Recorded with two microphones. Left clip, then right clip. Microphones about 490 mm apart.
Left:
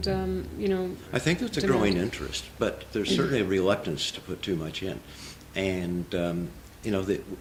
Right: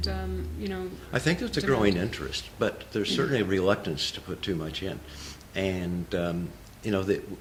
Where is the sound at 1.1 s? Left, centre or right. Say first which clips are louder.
Right 2 dB; right.